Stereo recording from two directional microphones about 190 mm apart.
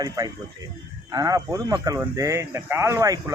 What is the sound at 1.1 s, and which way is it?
Speech, 20° right (ahead or behind).